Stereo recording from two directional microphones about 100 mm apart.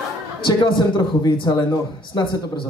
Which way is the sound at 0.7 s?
50° left (ahead or behind).